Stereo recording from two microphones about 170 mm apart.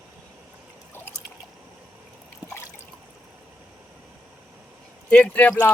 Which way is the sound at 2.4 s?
15° left (ahead or behind).